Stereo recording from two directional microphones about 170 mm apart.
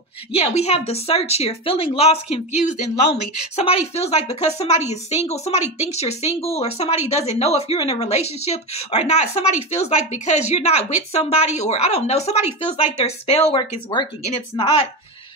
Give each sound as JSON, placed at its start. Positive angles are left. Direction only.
{"t": 0.3, "sound": "a woman's voice", "side_deg": 40}